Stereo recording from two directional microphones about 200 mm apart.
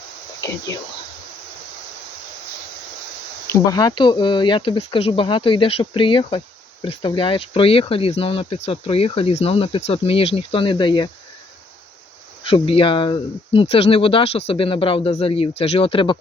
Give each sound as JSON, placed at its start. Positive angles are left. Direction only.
{"t": 3.4, "sound": "speech", "side_deg": 15}
{"t": 12.4, "sound": "speech", "side_deg": 25}